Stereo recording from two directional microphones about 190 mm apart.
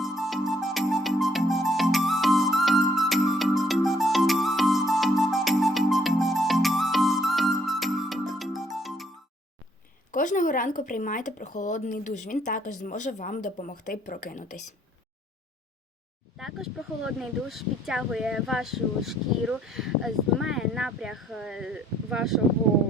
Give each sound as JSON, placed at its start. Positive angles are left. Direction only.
{"t": 0.0, "sound": "music", "side_deg": 0}
{"t": 10.1, "sound": "speech", "side_deg": 45}
{"t": 16.4, "sound": "speech", "side_deg": 0}